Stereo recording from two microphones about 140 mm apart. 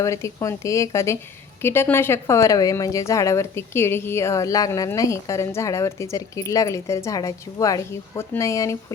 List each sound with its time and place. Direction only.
0.0 s speech: 20° left (ahead or behind)